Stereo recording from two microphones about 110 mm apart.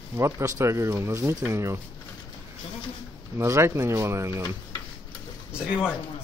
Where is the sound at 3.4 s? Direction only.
25° right (ahead or behind).